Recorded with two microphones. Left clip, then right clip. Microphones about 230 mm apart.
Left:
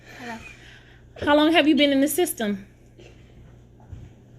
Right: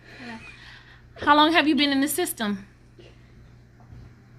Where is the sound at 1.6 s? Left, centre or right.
Centre.